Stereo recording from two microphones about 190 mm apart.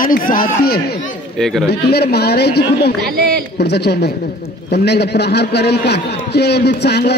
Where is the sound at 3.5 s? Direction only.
60° left (ahead or behind).